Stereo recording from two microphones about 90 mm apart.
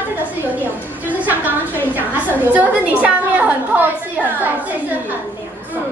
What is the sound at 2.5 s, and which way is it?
A woman's voice, 15° right (ahead or behind).